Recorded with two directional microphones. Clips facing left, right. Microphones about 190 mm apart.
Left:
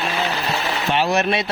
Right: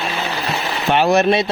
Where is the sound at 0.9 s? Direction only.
55° right (ahead or behind).